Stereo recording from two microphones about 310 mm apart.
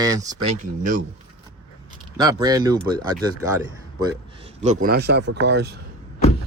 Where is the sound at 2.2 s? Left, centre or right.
Centre; by 5.7 s right.